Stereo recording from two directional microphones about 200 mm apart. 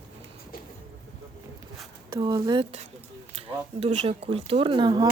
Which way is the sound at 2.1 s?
20° right (ahead or behind).